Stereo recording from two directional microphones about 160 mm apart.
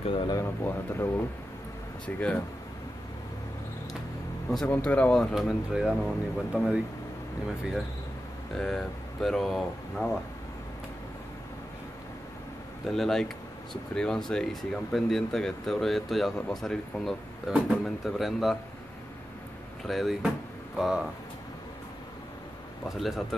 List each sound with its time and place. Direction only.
0.0 s a sound: 35° left (ahead or behind)
0.4 s speech: 15° left (ahead or behind)
4.5 s speech: 5° left (ahead or behind)
8.5 s speech: 5° left (ahead or behind)
12.8 s speech: centre (ahead or behind)
19.8 s speech: centre (ahead or behind)
22.8 s speech: centre (ahead or behind)